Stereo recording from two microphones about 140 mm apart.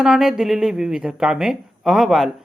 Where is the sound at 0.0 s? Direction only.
5° right (ahead or behind).